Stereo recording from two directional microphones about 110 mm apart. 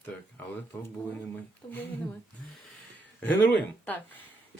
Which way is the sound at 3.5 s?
15° left (ahead or behind).